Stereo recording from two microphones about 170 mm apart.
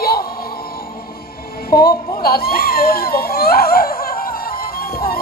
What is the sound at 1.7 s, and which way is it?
Speech, 60° left (ahead or behind).